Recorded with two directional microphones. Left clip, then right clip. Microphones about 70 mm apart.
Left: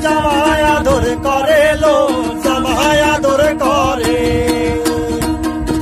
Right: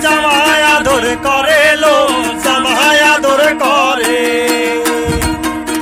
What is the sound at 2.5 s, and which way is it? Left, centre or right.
Music, right.